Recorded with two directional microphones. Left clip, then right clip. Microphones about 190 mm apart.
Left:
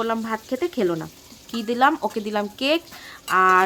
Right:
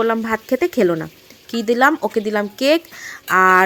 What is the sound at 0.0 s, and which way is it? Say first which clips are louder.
Speech: right 6 dB; 25° right (ahead or behind).